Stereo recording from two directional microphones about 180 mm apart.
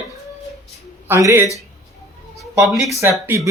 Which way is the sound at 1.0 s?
15° right (ahead or behind).